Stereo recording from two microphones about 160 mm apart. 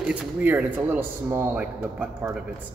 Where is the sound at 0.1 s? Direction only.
10° right (ahead or behind).